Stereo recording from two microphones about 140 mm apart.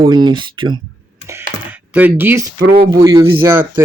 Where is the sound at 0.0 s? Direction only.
30° right (ahead or behind).